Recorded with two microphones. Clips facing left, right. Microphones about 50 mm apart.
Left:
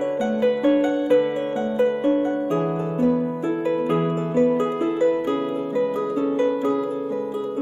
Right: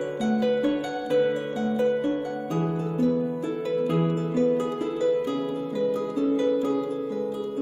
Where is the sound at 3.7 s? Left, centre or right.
Left.